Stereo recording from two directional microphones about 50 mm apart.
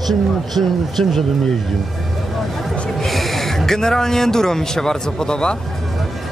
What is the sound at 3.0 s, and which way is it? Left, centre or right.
Speech, centre.